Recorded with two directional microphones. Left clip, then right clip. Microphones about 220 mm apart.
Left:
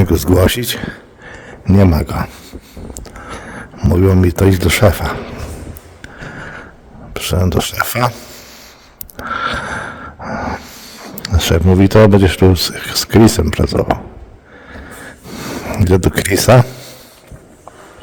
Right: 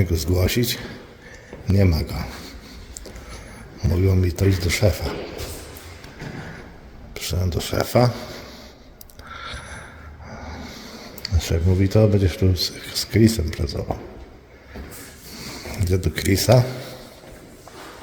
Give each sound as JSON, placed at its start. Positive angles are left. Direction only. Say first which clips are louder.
{"t": 0.0, "sound": "speech", "louder": "left 11 dB", "side_deg": 45}
{"t": 3.2, "sound": "speech", "louder": "left 12 dB", "side_deg": 45}
{"t": 7.1, "sound": "speech", "louder": "left 11 dB", "side_deg": 45}
{"t": 8.1, "sound": "speech", "louder": "even", "side_deg": 0}
{"t": 9.1, "sound": "a sound", "louder": "left 16 dB", "side_deg": 45}
{"t": 10.8, "sound": "speech", "louder": "left 6 dB", "side_deg": 45}
{"t": 15.4, "sound": "speech", "louder": "left 12 dB", "side_deg": 45}